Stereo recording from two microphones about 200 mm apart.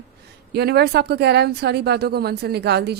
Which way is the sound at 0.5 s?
55° right (ahead or behind).